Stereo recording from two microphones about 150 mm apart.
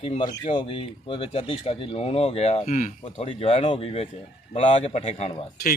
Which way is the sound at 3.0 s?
40° left (ahead or behind).